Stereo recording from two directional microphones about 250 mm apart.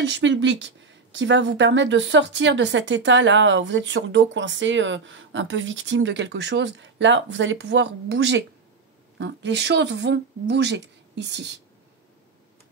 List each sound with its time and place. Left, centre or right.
0.0 s speech: right